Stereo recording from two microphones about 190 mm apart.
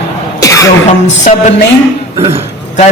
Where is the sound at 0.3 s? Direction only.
15° left (ahead or behind).